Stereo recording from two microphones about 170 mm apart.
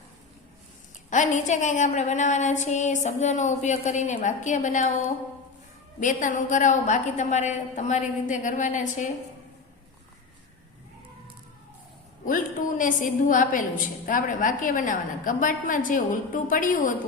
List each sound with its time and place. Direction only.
1.1 s a woman's voice: 45° left (ahead or behind)
6.0 s a woman's voice: 50° left (ahead or behind)
12.2 s a woman's voice: 50° left (ahead or behind)